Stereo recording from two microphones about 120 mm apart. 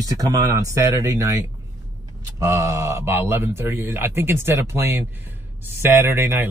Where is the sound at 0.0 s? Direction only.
30° right (ahead or behind).